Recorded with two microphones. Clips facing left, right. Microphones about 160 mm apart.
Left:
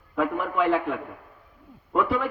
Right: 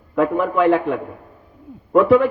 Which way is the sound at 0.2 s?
70° right (ahead or behind).